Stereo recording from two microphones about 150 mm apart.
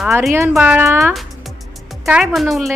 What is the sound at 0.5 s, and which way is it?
Speech, 5° right (ahead or behind).